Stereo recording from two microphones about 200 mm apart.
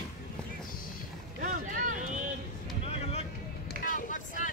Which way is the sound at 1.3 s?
40° right (ahead or behind).